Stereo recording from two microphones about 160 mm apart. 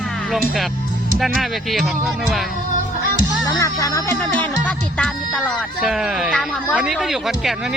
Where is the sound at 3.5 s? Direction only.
20° left (ahead or behind).